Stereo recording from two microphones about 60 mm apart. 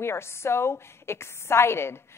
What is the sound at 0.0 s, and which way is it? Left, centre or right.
A woman's voice, left.